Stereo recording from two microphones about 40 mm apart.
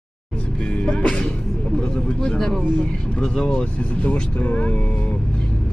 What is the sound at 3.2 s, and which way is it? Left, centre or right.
Speech, centre.